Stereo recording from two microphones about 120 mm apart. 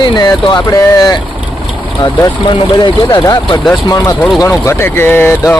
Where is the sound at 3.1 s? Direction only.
40° left (ahead or behind).